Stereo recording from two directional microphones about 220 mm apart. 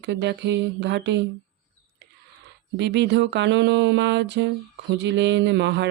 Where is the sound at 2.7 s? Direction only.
50° right (ahead or behind).